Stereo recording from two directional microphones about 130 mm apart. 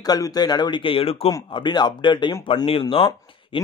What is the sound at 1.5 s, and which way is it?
A man's voice, 35° left (ahead or behind).